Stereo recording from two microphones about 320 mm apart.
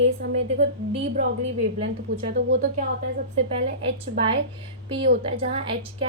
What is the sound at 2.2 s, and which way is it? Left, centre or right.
Speech, right.